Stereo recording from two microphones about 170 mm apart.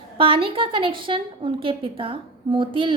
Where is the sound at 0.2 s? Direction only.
35° right (ahead or behind).